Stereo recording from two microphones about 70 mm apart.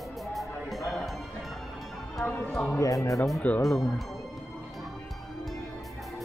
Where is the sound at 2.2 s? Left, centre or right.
Left.